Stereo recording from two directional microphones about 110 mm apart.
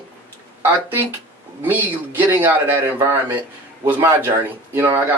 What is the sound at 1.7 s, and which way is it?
A man's voice, 15° right (ahead or behind).